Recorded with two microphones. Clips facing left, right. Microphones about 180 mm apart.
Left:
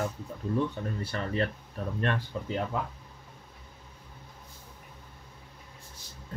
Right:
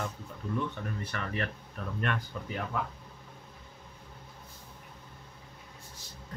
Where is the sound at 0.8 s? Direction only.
30° left (ahead or behind).